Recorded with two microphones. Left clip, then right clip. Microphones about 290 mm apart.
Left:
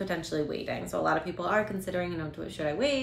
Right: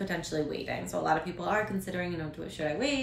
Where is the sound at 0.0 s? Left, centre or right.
Centre.